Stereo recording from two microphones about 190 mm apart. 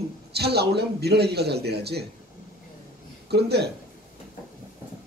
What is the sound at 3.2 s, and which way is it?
Speech, 60° right (ahead or behind).